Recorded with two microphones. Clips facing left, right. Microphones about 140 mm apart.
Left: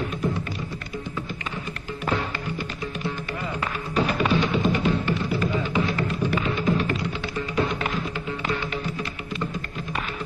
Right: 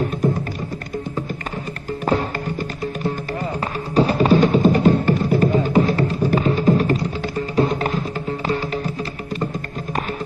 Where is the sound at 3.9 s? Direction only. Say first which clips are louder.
Right 8 dB; 35° right (ahead or behind).